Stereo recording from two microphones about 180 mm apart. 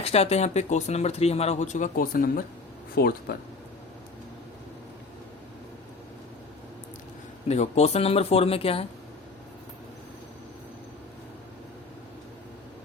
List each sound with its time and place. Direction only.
0.0 s speech: 35° left (ahead or behind); by 3.3 s 55° left (ahead or behind)
7.4 s speech: 40° left (ahead or behind)